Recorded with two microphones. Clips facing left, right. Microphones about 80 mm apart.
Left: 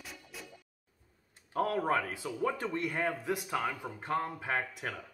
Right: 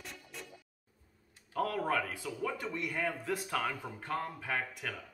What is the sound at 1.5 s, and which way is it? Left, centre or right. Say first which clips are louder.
Speech: left 2 dB; left.